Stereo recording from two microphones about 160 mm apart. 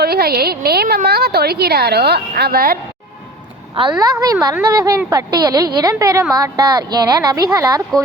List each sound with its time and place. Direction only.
0.0 s a woman's voice: 75° right (ahead or behind)
4.0 s a woman's voice: 25° right (ahead or behind)